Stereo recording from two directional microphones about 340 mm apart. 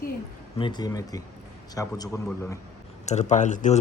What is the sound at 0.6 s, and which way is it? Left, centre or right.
A man's voice, centre.